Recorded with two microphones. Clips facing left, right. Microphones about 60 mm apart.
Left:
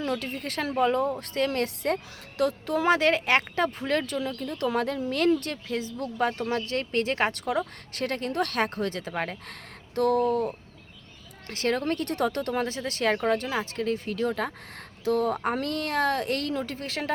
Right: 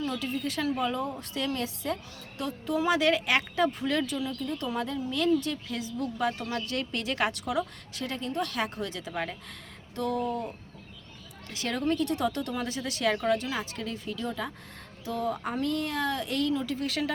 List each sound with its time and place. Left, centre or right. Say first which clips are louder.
0.0 s speech: left 1 dB; left
3.0 s speech: left 2 dB; left
5.6 s a woman's voice: left 2 dB; left
8.0 s speech: left 4 dB; left
9.5 s speech: left 2 dB; left
11.4 s speech: left 3 dB; left
16.9 s a woman's voice: left 5 dB; left